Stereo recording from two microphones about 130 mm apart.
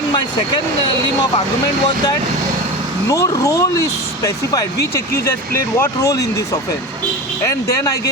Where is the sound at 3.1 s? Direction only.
25° left (ahead or behind).